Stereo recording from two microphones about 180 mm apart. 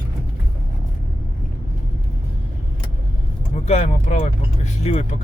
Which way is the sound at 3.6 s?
35° left (ahead or behind).